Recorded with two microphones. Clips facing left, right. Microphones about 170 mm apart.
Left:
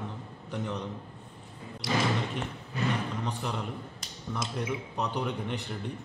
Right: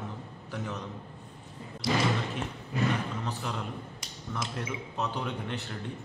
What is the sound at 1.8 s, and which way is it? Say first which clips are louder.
Speech: right 1 dB; 70° left (ahead or behind).